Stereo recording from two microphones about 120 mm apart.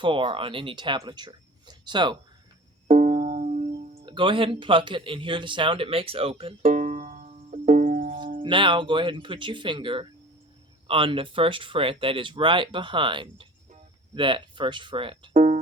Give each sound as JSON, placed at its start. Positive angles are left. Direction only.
{"t": 0.0, "sound": "speech", "side_deg": -45}
{"t": 2.8, "sound": "music", "side_deg": -85}
{"t": 4.0, "sound": "speech", "side_deg": -40}
{"t": 6.6, "sound": "music", "side_deg": -80}
{"t": 8.4, "sound": "speech", "side_deg": -45}
{"t": 15.3, "sound": "music", "side_deg": -80}